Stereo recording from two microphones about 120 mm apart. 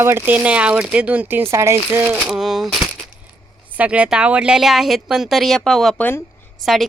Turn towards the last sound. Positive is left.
turn(degrees=0)  # may be behind; listen again after turning